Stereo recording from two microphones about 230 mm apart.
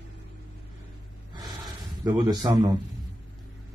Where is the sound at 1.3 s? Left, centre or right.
Centre.